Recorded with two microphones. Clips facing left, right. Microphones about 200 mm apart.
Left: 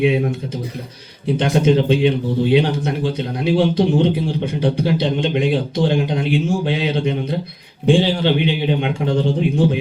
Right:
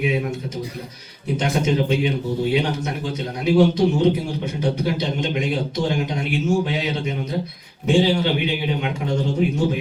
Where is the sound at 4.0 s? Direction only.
30° left (ahead or behind).